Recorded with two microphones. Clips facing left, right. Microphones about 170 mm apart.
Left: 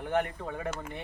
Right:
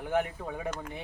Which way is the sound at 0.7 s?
5° left (ahead or behind).